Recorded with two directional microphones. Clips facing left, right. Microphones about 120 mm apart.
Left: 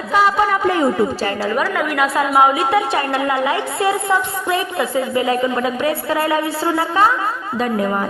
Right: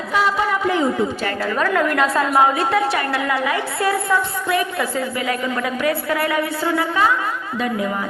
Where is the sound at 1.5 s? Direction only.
10° left (ahead or behind).